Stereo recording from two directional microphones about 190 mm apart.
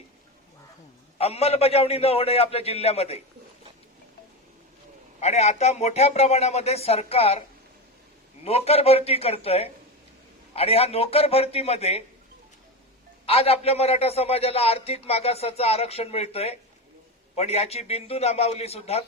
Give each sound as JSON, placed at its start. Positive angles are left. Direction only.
{"t": 1.2, "sound": "a man's voice", "side_deg": 30}
{"t": 5.2, "sound": "a man's voice", "side_deg": 35}
{"t": 8.4, "sound": "a man's voice", "side_deg": 30}
{"t": 13.2, "sound": "a man's voice", "side_deg": 30}